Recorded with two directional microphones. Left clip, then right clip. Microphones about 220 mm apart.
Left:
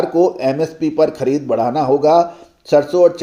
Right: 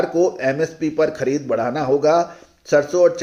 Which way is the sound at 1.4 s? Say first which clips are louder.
Left 5 dB; 90° left.